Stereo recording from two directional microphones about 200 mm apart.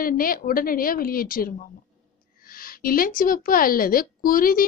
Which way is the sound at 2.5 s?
45° left (ahead or behind).